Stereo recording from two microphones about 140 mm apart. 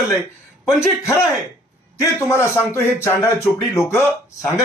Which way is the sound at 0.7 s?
20° left (ahead or behind).